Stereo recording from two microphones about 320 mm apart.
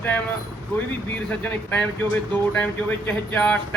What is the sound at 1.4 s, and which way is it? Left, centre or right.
Speech, centre.